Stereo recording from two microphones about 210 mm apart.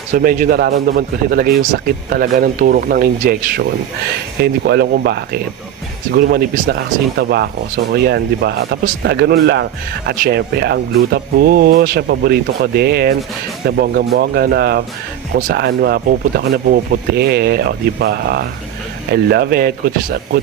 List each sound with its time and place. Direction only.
0.1 s speech: 40° right (ahead or behind)